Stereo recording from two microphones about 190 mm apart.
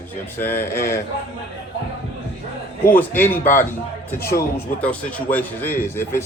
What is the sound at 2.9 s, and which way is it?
Speech, 10° left (ahead or behind).